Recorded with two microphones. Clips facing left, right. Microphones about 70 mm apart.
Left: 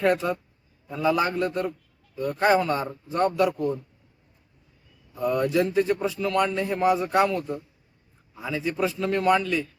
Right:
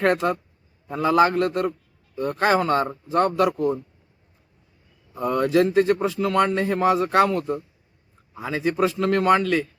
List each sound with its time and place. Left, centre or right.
0.0 s a man's voice: right
2.1 s a man's voice: right
5.2 s a man's voice: right
7.3 s a man's voice: right